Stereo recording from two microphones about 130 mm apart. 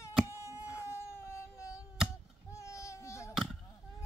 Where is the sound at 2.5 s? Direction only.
20° left (ahead or behind).